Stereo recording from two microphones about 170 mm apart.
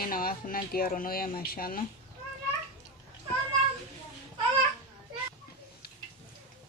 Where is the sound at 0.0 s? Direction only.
60° left (ahead or behind).